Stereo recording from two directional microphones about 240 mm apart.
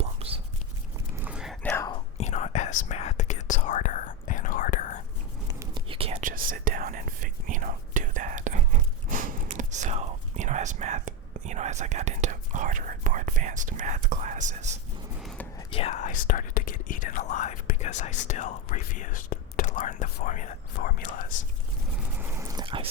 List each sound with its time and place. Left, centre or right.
0.0 s whispering: right
1.1 s whispering: centre
1.7 s whispering: centre
2.1 s whispering: left
5.5 s whispering: right
15.2 s whispering: centre
15.5 s whispering: left
22.1 s a sound: centre